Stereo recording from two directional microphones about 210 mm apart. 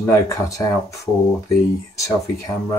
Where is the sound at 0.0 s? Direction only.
15° left (ahead or behind).